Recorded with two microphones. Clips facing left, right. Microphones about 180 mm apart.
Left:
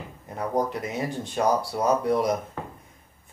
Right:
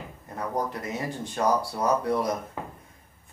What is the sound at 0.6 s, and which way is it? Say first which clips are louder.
Speech: left 4 dB; 20° left (ahead or behind).